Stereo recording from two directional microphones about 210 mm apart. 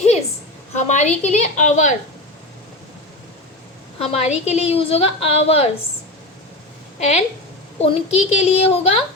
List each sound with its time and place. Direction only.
0.8 s a woman's voice: 35° left (ahead or behind)
4.0 s a woman's voice: 30° left (ahead or behind)
7.0 s a woman's voice: 30° left (ahead or behind)